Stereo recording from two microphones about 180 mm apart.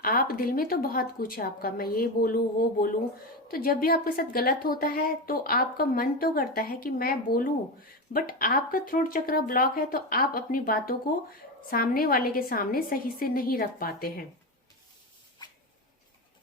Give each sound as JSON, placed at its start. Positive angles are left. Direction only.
{"t": 0.0, "sound": "a woman's voice", "side_deg": 55}